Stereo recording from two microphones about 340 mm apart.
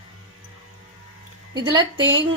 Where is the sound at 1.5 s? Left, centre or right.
Centre.